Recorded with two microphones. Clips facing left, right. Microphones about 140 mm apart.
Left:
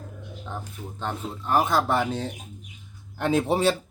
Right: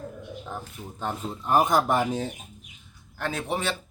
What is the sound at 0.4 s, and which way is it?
Speech, 5° right (ahead or behind).